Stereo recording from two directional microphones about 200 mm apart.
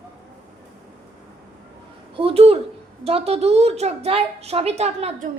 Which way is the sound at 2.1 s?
30° right (ahead or behind).